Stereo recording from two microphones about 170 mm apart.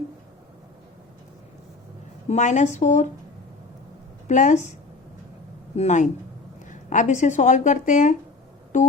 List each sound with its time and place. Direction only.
2.2 s speech: 45° left (ahead or behind)
4.3 s speech: 45° left (ahead or behind)
5.7 s speech: 40° left (ahead or behind)
8.7 s a sound: 50° left (ahead or behind)